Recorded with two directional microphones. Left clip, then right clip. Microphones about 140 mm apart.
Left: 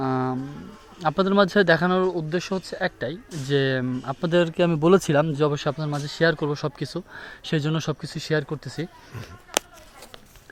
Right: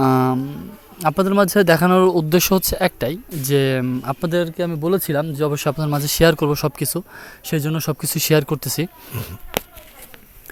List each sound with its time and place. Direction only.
0.0 s a sound: 40° right (ahead or behind)
1.0 s speech: 25° right (ahead or behind); by 3.2 s 40° right (ahead or behind)
3.5 s speech: 25° right (ahead or behind)
4.3 s a man's voice: centre (ahead or behind)
4.7 s speech: 15° left (ahead or behind)
5.1 s a man's voice: centre (ahead or behind)
5.5 s speech: 25° right (ahead or behind)
5.7 s speech: 40° right (ahead or behind)
7.3 s speech: 15° right (ahead or behind)
8.0 s speech: 45° right (ahead or behind)